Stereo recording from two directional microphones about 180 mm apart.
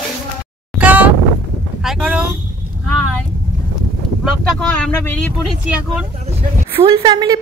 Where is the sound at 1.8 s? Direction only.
5° right (ahead or behind).